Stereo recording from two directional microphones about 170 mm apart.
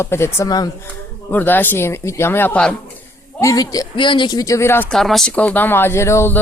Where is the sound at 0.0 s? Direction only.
15° left (ahead or behind).